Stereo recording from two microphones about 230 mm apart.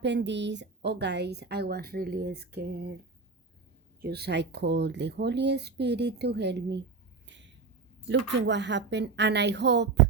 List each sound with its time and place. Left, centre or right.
0.0 s speech: right
4.0 s speech: right
7.3 s a sound: right
8.0 s speech: right